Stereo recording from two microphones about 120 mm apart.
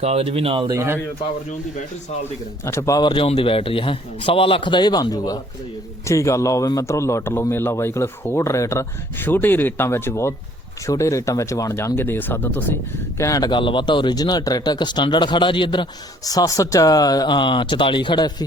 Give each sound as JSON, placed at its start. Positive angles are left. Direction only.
{"t": 0.0, "sound": "speech", "side_deg": -60}
{"t": 2.6, "sound": "speech", "side_deg": 25}
{"t": 3.2, "sound": "a man's voice", "side_deg": 50}
{"t": 13.5, "sound": "speech", "side_deg": 45}